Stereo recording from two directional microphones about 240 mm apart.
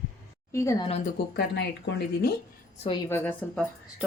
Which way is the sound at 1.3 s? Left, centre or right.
Left.